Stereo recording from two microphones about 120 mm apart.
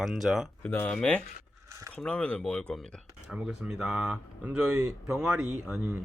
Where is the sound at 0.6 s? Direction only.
15° left (ahead or behind).